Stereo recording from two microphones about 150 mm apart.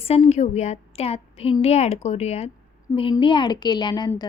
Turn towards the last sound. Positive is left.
turn(degrees=30)  # may be behind; listen again after turning